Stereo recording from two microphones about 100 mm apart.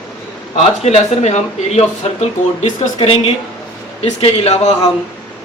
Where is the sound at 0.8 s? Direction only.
90° left.